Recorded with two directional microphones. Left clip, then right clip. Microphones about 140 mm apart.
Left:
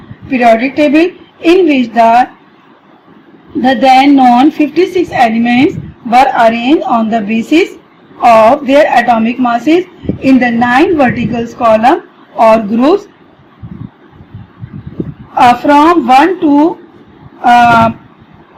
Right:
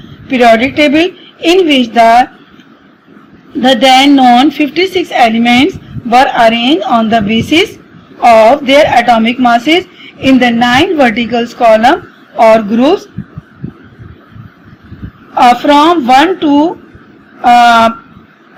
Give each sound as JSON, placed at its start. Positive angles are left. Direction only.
{"t": 0.3, "sound": "a woman's voice", "side_deg": -40}
{"t": 3.6, "sound": "a woman's voice", "side_deg": -40}
{"t": 15.4, "sound": "a woman's voice", "side_deg": -45}
{"t": 17.4, "sound": "a sound", "side_deg": -45}